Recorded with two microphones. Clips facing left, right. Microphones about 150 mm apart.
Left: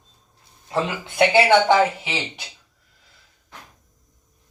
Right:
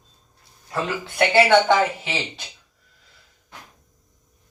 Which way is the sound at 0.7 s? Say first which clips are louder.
Left 2 dB; 20° left (ahead or behind).